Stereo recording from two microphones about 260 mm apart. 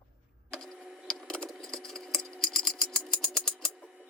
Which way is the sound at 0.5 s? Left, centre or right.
Centre.